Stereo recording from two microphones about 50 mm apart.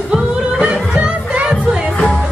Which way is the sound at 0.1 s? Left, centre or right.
Centre.